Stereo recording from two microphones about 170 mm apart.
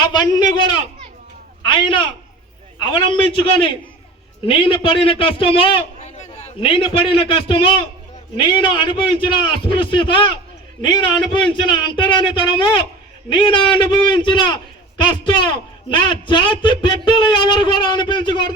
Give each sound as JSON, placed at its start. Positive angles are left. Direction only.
{"t": 0.0, "sound": "a man's voice", "side_deg": 25}
{"t": 4.4, "sound": "a man's voice", "side_deg": 30}